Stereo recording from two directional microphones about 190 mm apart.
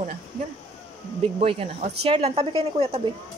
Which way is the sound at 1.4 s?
30° right (ahead or behind).